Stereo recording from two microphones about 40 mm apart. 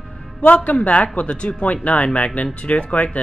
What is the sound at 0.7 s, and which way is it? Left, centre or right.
Speech, left.